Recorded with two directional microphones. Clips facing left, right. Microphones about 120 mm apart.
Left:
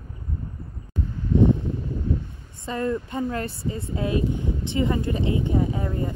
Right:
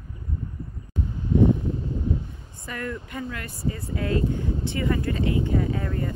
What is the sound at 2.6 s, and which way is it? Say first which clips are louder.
Speech: left 7 dB; 25° left (ahead or behind).